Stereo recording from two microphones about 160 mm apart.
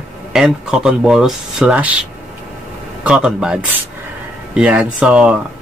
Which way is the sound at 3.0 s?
5° right (ahead or behind).